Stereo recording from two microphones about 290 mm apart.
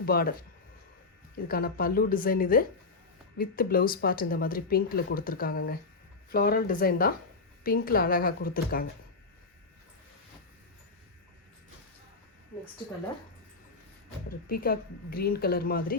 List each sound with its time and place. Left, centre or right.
0.0 s speech: left
1.5 s speech: left
14.3 s speech: left